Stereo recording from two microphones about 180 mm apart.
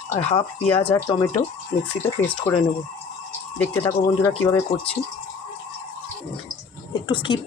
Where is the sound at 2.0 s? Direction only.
25° left (ahead or behind).